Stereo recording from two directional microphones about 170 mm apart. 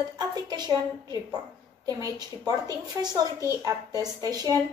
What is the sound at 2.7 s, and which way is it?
Speech, 20° right (ahead or behind).